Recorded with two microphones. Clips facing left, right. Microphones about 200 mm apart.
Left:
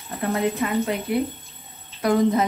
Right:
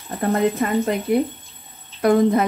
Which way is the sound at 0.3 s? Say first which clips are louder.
Right 4 dB; 50° right (ahead or behind).